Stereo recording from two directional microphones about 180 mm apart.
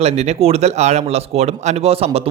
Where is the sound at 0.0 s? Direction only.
35° right (ahead or behind).